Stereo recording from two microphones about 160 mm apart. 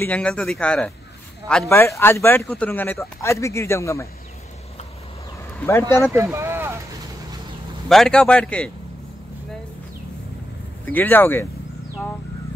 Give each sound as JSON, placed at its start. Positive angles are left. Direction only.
{"t": 0.0, "sound": "speech", "side_deg": 10}
{"t": 5.6, "sound": "speech", "side_deg": 15}
{"t": 6.1, "sound": "speech", "side_deg": -15}
{"t": 7.9, "sound": "a man's voice", "side_deg": 5}
{"t": 10.9, "sound": "speech", "side_deg": 10}